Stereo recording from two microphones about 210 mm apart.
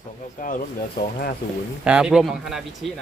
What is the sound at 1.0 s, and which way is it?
Speech, 50° left (ahead or behind).